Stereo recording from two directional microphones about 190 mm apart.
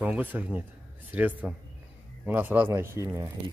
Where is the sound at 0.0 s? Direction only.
10° right (ahead or behind).